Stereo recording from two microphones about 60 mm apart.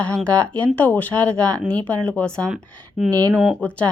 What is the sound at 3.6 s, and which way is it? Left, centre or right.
Speech, left.